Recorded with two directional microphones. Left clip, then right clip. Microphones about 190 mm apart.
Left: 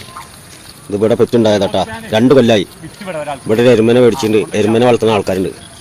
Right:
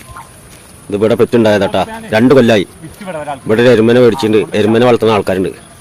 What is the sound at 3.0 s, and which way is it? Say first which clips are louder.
Speech: even; 55° right (ahead or behind).